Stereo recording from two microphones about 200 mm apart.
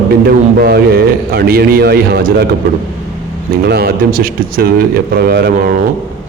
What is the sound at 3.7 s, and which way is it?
A man's voice, 50° right (ahead or behind).